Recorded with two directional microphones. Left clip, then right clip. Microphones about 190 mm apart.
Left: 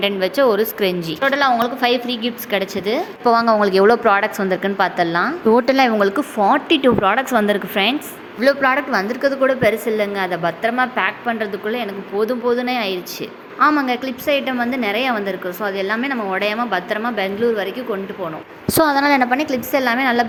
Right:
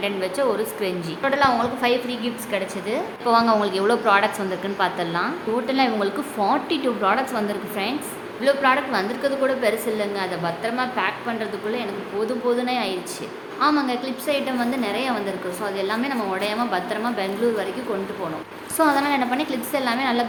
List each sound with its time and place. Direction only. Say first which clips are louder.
0.0 s a woman's voice: left 7 dB; 30° left (ahead or behind)
1.2 s a woman's voice: left 3 dB; 20° left (ahead or behind)
5.5 s a woman's voice: left 6 dB; 45° left (ahead or behind)
6.7 s a woman's voice: left 6 dB; 30° left (ahead or behind)
18.7 s a woman's voice: left 5 dB; 45° left (ahead or behind); by 20.2 s 30° left (ahead or behind)